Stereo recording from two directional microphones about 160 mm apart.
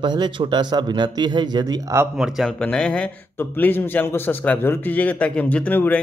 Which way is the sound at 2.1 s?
Centre (ahead or behind).